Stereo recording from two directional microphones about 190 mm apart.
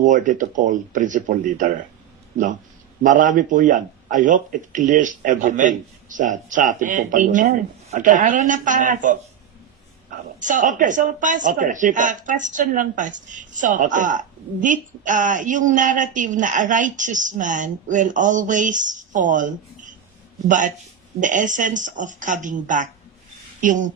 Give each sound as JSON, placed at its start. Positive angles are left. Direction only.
{"t": 0.0, "sound": "a woman's voice", "side_deg": -40}
{"t": 3.0, "sound": "a woman's voice", "side_deg": -40}
{"t": 10.4, "sound": "a woman's voice", "side_deg": -40}